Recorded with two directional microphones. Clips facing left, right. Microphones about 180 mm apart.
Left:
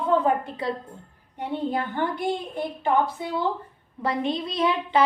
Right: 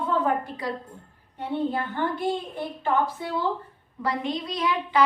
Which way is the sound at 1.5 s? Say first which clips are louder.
Even; 15° left (ahead or behind).